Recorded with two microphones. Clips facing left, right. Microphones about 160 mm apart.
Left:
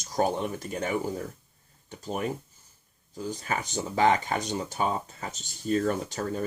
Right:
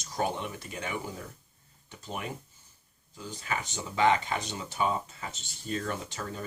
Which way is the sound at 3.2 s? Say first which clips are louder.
Left 4 dB; 40° left (ahead or behind).